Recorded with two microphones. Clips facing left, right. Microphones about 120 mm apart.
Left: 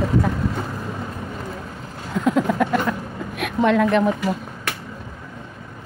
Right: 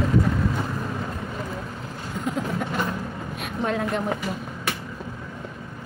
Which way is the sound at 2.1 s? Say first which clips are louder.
Left 9 dB; 90° left.